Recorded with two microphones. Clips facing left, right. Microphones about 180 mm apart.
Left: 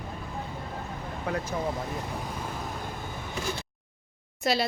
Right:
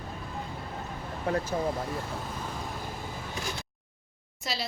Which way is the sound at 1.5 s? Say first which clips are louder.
Even; 45° right (ahead or behind).